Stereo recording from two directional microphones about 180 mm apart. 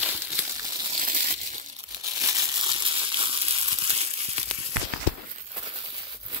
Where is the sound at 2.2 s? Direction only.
25° right (ahead or behind).